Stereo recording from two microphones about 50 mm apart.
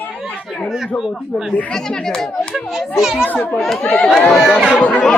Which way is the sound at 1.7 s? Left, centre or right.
Centre.